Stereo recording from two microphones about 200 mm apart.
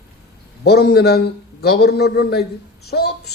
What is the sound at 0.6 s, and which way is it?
A man's voice, 55° left (ahead or behind).